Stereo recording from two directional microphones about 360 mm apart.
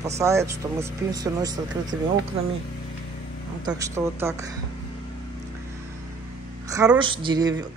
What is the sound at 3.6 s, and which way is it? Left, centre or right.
Speech, centre.